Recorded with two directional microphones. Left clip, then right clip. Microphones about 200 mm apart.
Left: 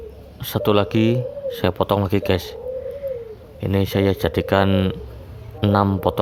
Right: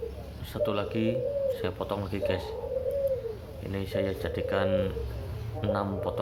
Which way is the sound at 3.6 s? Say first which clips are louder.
Left 11 dB; 50° left (ahead or behind).